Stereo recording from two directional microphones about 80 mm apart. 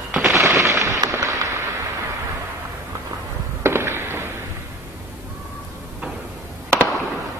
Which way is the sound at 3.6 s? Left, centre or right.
Right.